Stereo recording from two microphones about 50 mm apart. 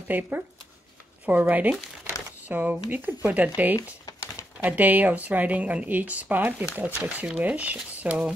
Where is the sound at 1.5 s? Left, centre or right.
Right.